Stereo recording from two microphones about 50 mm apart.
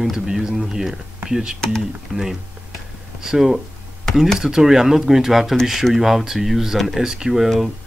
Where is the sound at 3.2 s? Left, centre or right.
Centre.